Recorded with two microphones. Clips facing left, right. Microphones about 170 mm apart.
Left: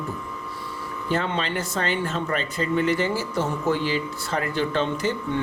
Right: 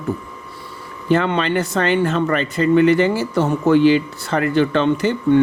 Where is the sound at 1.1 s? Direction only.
70° right (ahead or behind).